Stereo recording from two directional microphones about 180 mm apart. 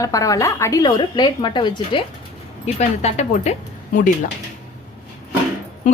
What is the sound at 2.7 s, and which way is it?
Speech, 35° left (ahead or behind).